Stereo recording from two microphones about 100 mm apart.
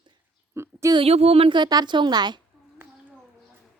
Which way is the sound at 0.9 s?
85° right.